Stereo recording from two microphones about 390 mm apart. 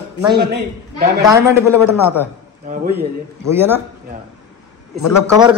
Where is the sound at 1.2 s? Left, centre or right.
Centre.